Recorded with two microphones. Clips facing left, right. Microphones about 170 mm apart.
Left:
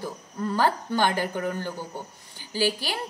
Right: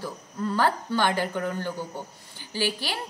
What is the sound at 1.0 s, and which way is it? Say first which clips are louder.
Speech: even; 45° left (ahead or behind).